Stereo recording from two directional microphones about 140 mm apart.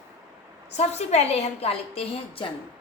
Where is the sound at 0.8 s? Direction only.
50° left (ahead or behind).